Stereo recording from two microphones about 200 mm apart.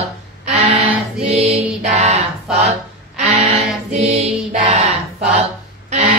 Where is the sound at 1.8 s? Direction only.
35° right (ahead or behind).